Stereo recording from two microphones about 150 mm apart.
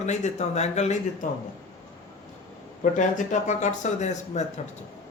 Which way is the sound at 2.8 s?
55° left (ahead or behind).